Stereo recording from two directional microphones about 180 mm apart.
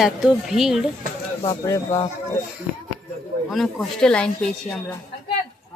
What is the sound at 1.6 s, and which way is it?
Speech, 20° left (ahead or behind).